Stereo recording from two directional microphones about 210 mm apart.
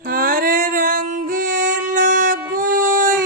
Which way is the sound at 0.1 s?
45° right (ahead or behind).